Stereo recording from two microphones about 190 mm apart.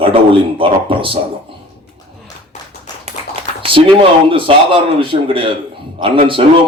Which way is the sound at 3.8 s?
30° right (ahead or behind).